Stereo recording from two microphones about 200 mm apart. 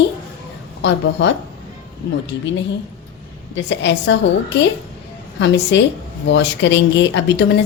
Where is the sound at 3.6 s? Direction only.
65° left (ahead or behind).